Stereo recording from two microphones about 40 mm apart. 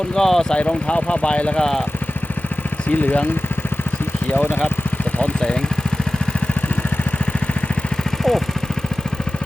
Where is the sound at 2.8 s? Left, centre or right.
Left.